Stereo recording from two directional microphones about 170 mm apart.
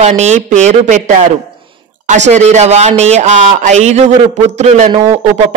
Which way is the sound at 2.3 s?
40° right (ahead or behind).